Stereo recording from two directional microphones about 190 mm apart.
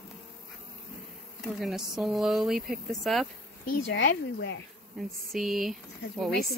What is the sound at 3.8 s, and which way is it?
Speech, 70° left (ahead or behind).